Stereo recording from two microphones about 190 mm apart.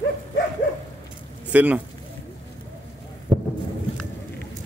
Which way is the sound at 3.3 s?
25° right (ahead or behind).